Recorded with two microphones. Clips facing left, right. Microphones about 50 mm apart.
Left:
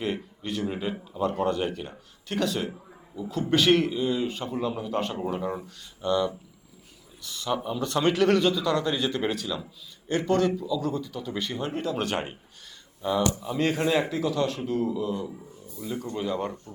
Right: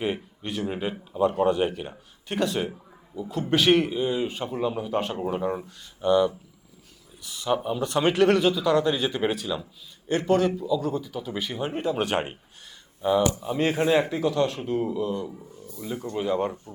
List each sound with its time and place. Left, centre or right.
0.0 s a man's voice: centre
14.6 s a man's voice: centre
15.1 s speech: centre
15.8 s a man's voice: centre